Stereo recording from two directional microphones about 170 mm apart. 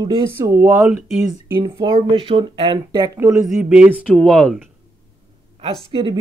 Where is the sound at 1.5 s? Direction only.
20° right (ahead or behind).